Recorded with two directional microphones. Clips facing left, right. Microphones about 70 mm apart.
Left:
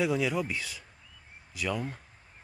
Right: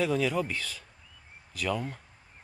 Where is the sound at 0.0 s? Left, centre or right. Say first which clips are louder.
Right 1 dB; centre.